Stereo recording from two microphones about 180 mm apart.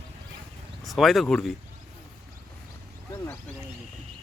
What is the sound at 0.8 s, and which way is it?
Speech, centre (ahead or behind).